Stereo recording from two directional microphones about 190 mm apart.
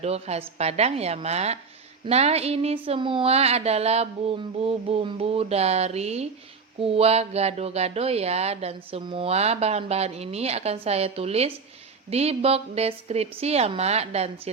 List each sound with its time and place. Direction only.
0.0 s speech: 35° right (ahead or behind)